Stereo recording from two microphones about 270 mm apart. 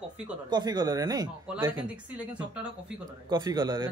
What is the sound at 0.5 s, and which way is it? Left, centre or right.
Speech, centre.